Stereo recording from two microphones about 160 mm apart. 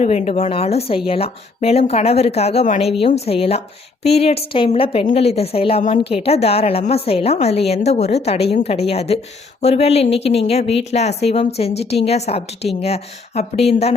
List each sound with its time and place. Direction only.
0.0 s a woman's voice: 45° left (ahead or behind)